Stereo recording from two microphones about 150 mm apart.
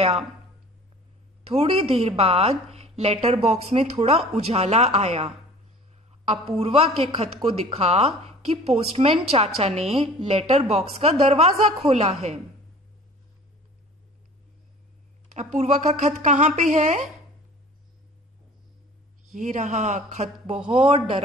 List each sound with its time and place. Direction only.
1.5 s a woman's voice: 40° right (ahead or behind)
15.2 s a woman's voice: 50° right (ahead or behind)
19.3 s a woman's voice: 55° right (ahead or behind)
20.6 s a man's voice: 35° right (ahead or behind)